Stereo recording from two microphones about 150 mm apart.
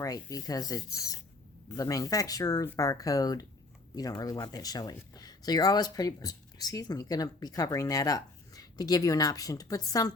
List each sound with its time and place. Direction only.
0.0 s speech: 25° left (ahead or behind)